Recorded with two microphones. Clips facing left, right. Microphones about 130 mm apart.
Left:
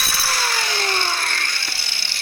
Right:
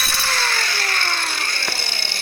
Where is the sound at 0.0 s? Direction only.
5° left (ahead or behind).